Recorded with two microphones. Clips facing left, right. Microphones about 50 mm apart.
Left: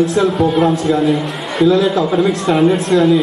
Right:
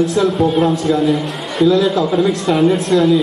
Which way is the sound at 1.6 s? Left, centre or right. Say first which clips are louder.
Left 1 dB; centre.